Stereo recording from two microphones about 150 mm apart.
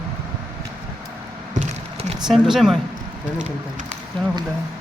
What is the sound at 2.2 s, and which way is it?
Speech, centre (ahead or behind).